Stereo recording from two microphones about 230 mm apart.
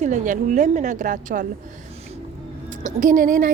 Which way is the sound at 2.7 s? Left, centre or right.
Right.